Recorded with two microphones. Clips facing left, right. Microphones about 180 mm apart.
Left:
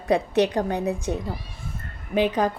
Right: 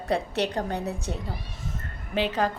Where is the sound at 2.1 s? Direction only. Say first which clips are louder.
Left 4 dB; 15° left (ahead or behind).